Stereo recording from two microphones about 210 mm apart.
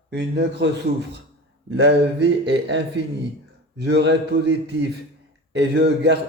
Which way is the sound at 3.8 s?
55° right (ahead or behind).